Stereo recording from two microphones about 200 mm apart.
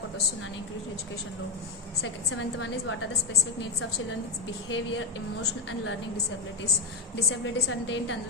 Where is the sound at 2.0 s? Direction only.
85° left.